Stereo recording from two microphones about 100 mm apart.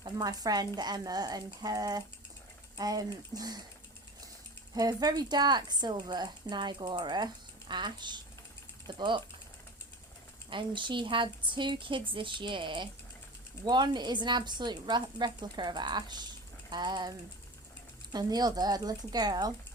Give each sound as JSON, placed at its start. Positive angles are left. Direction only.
{"t": 0.0, "sound": "speech", "side_deg": -40}
{"t": 4.7, "sound": "a woman's voice", "side_deg": -40}
{"t": 10.5, "sound": "a woman's voice", "side_deg": -55}